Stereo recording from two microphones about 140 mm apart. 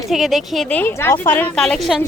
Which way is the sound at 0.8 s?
15° left (ahead or behind).